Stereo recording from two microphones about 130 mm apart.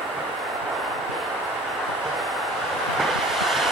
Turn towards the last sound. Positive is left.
turn(degrees=0)  # may be behind; listen again after turning